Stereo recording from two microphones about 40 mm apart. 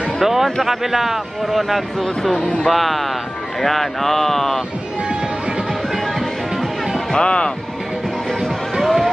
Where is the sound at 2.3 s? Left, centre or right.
Left.